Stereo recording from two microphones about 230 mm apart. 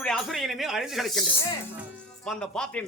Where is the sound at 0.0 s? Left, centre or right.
Centre.